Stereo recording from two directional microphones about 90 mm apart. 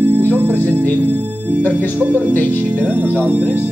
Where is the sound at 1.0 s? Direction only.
20° right (ahead or behind).